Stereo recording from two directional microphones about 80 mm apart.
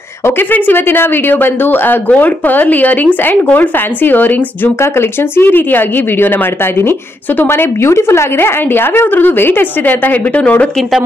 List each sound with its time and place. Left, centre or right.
0.4 s a woman's voice: left
5.4 s a woman's voice: left
7.3 s a woman's voice: left